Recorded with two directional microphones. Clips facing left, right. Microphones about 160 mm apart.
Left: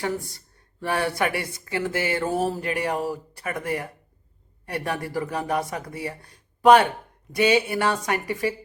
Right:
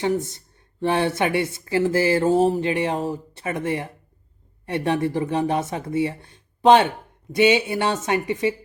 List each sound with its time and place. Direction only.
0.0 s speech: 20° right (ahead or behind)